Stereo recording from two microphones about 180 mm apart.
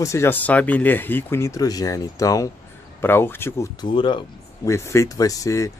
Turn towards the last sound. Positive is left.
turn(degrees=15)  # may be behind; listen again after turning